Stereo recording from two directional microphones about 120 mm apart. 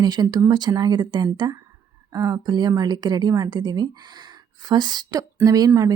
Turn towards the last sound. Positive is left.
turn(degrees=-30)  # may be behind; listen again after turning